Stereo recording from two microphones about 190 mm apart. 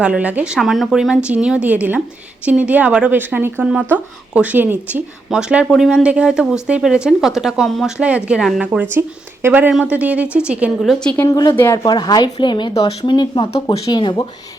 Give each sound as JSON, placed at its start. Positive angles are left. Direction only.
{"t": 0.0, "sound": "a woman's voice", "side_deg": -5}
{"t": 11.2, "sound": "speech", "side_deg": 15}